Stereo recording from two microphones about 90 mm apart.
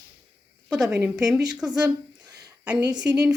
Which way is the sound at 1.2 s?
5° right (ahead or behind).